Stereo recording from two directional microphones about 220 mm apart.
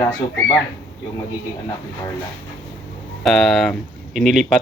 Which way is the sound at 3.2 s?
Centre (ahead or behind).